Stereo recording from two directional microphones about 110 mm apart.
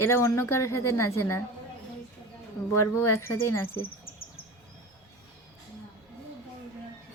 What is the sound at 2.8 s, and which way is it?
Speech, 25° left (ahead or behind).